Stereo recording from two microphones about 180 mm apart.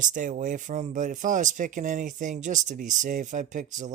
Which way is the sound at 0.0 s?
45° right (ahead or behind).